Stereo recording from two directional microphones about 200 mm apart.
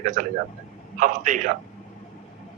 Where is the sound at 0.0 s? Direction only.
40° right (ahead or behind).